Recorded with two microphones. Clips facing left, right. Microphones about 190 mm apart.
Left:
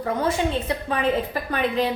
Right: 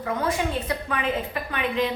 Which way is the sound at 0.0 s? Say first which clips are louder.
Left 3 dB; 30° left (ahead or behind).